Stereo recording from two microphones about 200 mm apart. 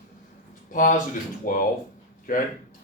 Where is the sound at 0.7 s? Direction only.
40° left (ahead or behind).